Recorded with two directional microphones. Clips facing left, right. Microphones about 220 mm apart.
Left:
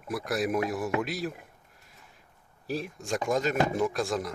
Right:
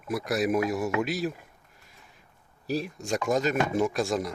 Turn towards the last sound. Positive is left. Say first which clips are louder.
# right 2 dB
turn(degrees=0)  # may be behind; listen again after turning